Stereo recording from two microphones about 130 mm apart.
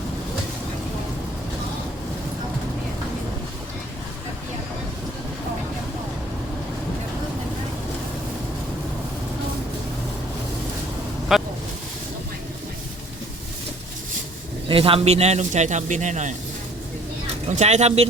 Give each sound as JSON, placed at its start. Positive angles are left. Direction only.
{"t": 11.3, "sound": "vehicle", "side_deg": 0}
{"t": 14.7, "sound": "a man's voice", "side_deg": -45}
{"t": 17.5, "sound": "a man's voice", "side_deg": -60}